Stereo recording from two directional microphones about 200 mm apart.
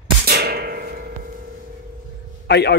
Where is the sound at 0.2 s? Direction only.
50° right (ahead or behind).